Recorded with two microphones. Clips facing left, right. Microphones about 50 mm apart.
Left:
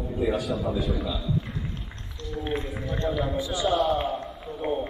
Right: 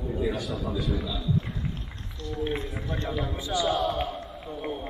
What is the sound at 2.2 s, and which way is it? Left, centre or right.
A man's voice, centre.